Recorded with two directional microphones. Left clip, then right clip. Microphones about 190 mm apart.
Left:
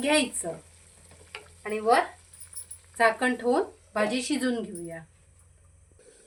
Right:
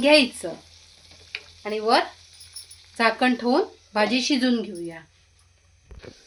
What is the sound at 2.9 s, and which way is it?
Speech, 45° right (ahead or behind).